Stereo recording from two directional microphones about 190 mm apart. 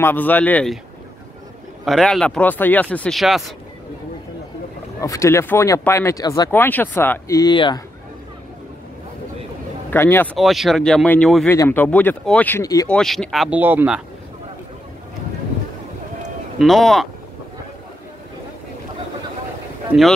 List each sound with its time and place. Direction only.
0.0 s speech: 10° left (ahead or behind)
1.9 s speech: centre (ahead or behind)
5.0 s speech: 15° left (ahead or behind)
9.8 s speech: 10° left (ahead or behind)
10.3 s speech: centre (ahead or behind); by 12.8 s 15° left (ahead or behind)
12.8 s speech: 5° left (ahead or behind)
16.5 s speech: centre (ahead or behind)
19.9 s speech: 5° right (ahead or behind)